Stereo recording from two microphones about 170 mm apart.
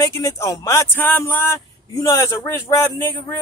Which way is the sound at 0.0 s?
20° left (ahead or behind).